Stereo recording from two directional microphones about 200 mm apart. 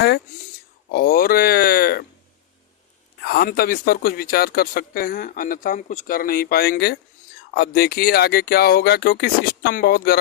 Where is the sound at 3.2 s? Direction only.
50° left (ahead or behind).